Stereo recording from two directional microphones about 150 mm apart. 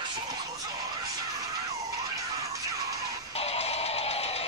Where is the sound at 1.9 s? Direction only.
25° right (ahead or behind).